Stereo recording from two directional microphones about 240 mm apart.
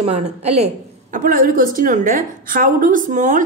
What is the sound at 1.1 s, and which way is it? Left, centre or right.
A woman's voice, right.